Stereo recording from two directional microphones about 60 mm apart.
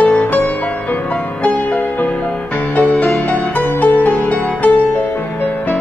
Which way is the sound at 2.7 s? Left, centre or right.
Left.